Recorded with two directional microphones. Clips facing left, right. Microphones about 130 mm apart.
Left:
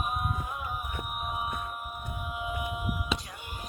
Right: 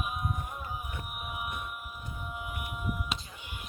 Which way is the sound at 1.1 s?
40° left (ahead or behind).